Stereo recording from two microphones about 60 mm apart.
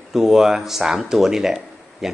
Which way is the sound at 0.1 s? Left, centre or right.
Centre.